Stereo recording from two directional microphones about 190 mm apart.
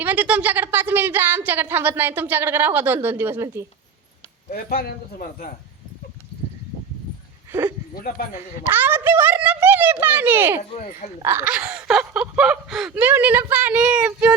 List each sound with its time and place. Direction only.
0.0 s speech: 10° right (ahead or behind)
4.5 s speech: 50° left (ahead or behind)
8.4 s speech: 10° right (ahead or behind)
10.6 s speech: 35° left (ahead or behind)
11.2 s speech: 10° right (ahead or behind)